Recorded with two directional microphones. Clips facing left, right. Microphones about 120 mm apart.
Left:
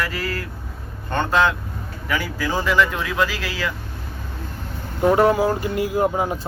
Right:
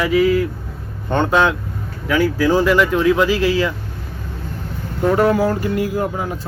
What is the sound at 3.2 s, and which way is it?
Speech, 25° right (ahead or behind).